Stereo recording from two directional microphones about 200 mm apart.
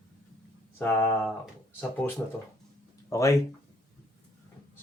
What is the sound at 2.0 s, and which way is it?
Speech, 10° left (ahead or behind).